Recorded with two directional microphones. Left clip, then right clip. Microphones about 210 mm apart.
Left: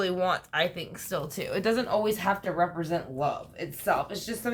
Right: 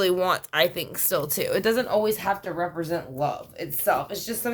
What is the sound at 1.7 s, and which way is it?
Speech, 30° right (ahead or behind).